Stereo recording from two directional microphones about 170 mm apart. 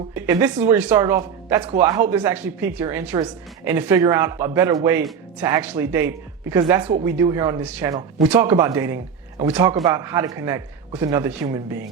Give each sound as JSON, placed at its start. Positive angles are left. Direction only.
{"t": 0.1, "sound": "a man's voice", "side_deg": -15}
{"t": 7.6, "sound": "a man's voice", "side_deg": -10}